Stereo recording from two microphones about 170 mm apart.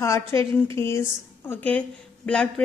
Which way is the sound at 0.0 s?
15° left (ahead or behind).